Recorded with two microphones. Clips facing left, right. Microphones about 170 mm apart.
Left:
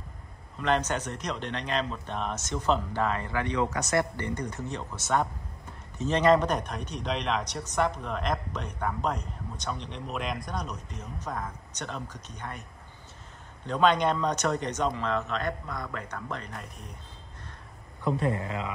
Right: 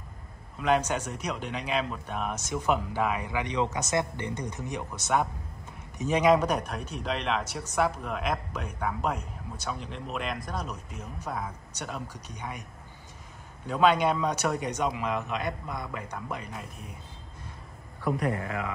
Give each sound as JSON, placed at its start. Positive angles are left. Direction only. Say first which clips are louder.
{"t": 0.6, "sound": "speech", "louder": "right 1 dB", "side_deg": -10}
{"t": 13.7, "sound": "speech", "louder": "right 1 dB", "side_deg": -5}
{"t": 18.0, "sound": "speech", "louder": "left 1 dB", "side_deg": 25}